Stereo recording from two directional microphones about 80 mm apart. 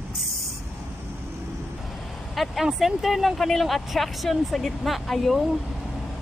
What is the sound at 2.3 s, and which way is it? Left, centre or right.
Speech, centre.